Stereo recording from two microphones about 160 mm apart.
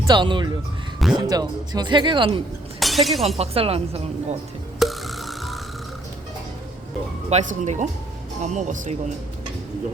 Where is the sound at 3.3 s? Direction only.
40° right (ahead or behind).